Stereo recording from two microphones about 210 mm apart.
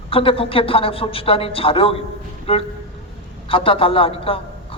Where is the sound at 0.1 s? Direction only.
25° left (ahead or behind).